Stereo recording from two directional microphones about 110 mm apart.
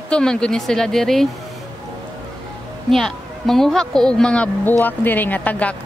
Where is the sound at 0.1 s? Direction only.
5° left (ahead or behind).